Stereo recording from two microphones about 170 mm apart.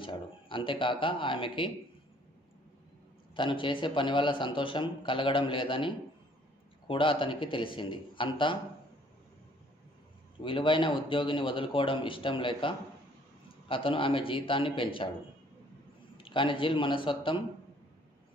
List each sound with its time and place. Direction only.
0.0 s a man's voice: 30° left (ahead or behind)
3.3 s a man's voice: 30° left (ahead or behind)
10.4 s a man's voice: 30° left (ahead or behind)
16.2 s a man's voice: 30° left (ahead or behind)